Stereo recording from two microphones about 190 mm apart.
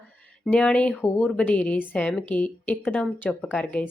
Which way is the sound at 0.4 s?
5° left (ahead or behind).